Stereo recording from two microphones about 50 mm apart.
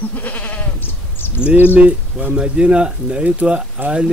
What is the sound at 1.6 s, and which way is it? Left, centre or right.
Speech, right.